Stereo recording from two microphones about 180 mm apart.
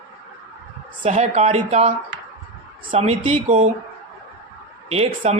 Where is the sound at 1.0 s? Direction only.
40° right (ahead or behind).